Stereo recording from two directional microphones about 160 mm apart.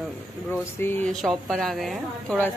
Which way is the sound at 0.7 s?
15° left (ahead or behind).